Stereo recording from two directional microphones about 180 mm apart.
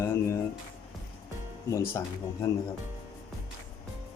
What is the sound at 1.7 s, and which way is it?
Speech, 15° left (ahead or behind).